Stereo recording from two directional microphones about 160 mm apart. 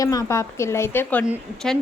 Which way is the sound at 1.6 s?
5° left (ahead or behind).